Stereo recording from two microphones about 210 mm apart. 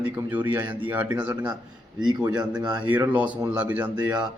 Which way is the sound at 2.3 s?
20° right (ahead or behind).